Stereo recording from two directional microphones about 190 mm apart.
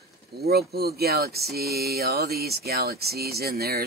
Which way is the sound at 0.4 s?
55° right (ahead or behind).